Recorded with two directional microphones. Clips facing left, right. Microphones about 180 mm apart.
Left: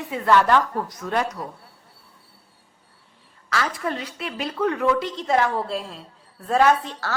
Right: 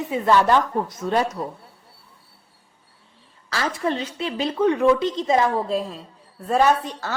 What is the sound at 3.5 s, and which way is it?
A woman's voice, 30° right (ahead or behind).